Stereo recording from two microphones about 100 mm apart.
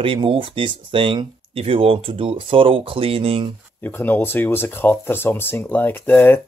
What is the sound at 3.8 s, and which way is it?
Speech, 20° left (ahead or behind).